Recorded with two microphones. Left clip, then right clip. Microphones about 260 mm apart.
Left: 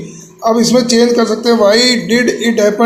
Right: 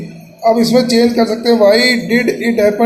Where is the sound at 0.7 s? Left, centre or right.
Centre.